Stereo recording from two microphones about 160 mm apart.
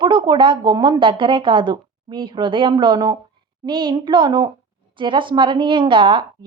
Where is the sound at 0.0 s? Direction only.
30° right (ahead or behind).